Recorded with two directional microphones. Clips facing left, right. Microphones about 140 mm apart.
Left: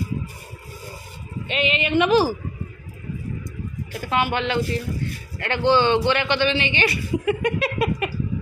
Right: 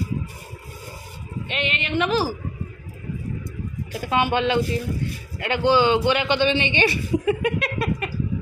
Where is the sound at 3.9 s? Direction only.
15° right (ahead or behind).